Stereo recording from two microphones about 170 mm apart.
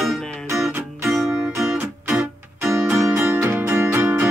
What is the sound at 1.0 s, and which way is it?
Music, centre (ahead or behind).